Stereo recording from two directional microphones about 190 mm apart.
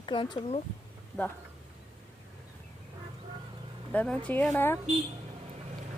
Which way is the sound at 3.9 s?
5° left (ahead or behind).